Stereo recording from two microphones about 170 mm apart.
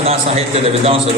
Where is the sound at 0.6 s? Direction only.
35° right (ahead or behind).